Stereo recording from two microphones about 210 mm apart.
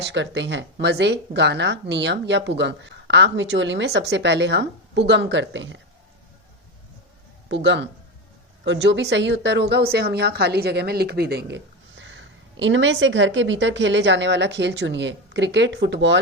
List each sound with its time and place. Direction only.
0.0 s a woman's voice: 55° right (ahead or behind)
7.4 s a woman's voice: 60° right (ahead or behind)